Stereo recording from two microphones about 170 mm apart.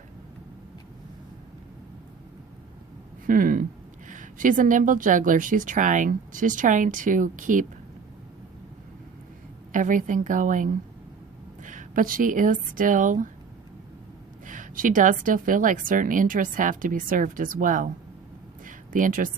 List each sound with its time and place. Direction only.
3.2 s speech: 50° right (ahead or behind)
9.7 s speech: 50° right (ahead or behind)
14.4 s speech: 50° right (ahead or behind)
18.6 s a sound: 50° right (ahead or behind)